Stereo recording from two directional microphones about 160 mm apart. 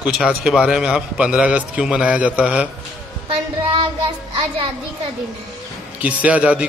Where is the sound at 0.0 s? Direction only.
5° right (ahead or behind).